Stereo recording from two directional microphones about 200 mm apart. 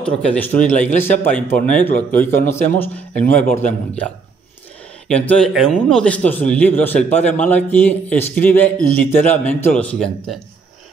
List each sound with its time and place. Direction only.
0.0 s a man's voice: 5° left (ahead or behind)